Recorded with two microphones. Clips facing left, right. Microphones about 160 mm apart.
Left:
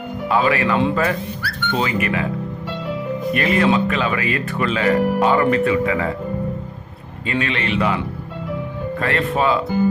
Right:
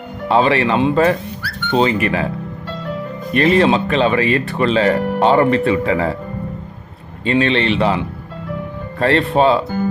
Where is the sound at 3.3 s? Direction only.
30° right (ahead or behind).